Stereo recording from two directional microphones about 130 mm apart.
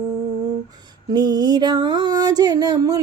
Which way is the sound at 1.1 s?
30° right (ahead or behind).